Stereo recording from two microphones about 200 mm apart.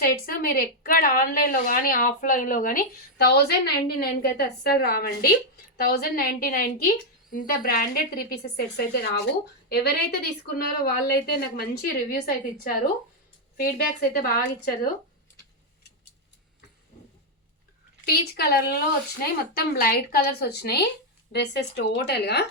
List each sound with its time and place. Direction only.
0.0 s a woman's voice: 45° left (ahead or behind)
18.0 s a woman's voice: 50° left (ahead or behind)